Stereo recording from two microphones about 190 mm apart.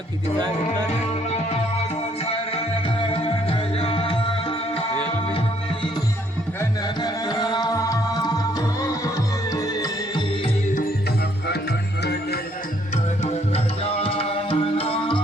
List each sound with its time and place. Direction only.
0.3 s music: 25° right (ahead or behind)
3.1 s music: 30° left (ahead or behind)
6.6 s music: 20° left (ahead or behind)
9.6 s music: 20° left (ahead or behind)
13.8 s music: 30° left (ahead or behind)